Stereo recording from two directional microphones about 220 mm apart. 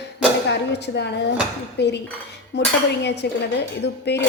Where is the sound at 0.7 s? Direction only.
50° left (ahead or behind).